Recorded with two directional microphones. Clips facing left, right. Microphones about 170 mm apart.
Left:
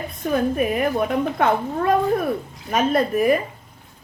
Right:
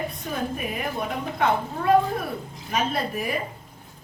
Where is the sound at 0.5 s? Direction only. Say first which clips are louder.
Left 9 dB; 55° left (ahead or behind).